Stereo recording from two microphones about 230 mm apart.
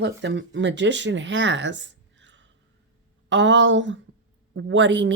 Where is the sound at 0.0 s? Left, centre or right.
Right.